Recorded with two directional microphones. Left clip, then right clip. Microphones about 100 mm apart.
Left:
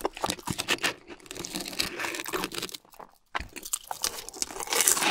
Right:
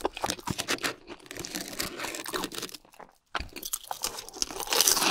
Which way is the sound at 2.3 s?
25° left (ahead or behind).